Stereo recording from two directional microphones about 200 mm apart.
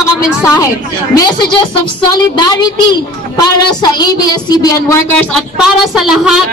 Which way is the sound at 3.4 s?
20° left (ahead or behind).